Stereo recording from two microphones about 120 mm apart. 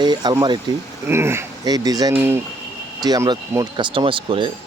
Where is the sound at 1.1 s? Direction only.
20° right (ahead or behind).